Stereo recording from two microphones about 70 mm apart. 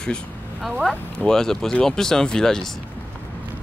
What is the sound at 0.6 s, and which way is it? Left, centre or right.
Speech, centre.